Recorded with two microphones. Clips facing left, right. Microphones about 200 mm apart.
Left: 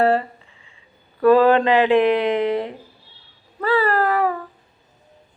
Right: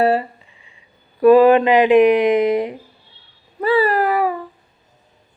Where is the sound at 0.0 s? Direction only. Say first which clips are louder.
Right 1 dB; 15° right (ahead or behind).